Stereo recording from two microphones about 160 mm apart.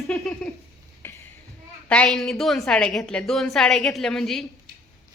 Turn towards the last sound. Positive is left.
turn(degrees=0)  # may be behind; listen again after turning